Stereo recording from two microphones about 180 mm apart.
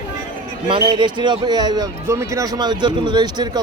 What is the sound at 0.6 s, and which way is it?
A man's voice, 30° right (ahead or behind).